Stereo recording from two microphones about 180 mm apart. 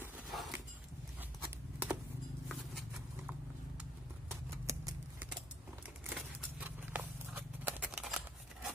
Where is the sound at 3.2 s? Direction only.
10° right (ahead or behind).